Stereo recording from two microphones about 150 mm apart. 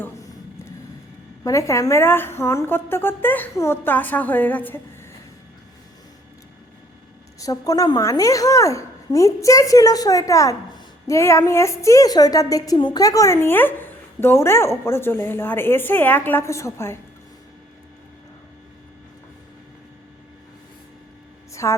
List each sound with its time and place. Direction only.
1.5 s a woman's voice: 20° left (ahead or behind)
7.3 s a woman's voice: 20° left (ahead or behind)
21.5 s a sound: 20° left (ahead or behind)